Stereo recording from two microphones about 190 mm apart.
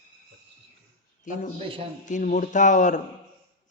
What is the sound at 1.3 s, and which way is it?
Speech, 40° left (ahead or behind).